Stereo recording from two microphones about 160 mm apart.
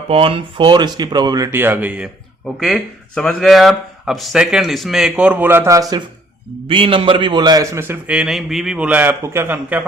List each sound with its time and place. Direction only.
0.1 s speech: 35° right (ahead or behind); by 2.0 s 10° right (ahead or behind)
2.6 s speech: centre (ahead or behind); by 6.0 s 20° right (ahead or behind)
6.7 s a man's voice: 35° right (ahead or behind); by 9.8 s 10° right (ahead or behind)